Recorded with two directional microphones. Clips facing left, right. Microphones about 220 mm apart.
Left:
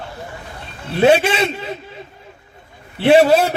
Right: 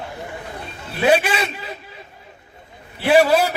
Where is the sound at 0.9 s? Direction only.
25° left (ahead or behind).